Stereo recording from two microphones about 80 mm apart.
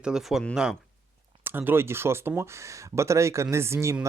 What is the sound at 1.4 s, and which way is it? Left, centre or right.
Speech, right.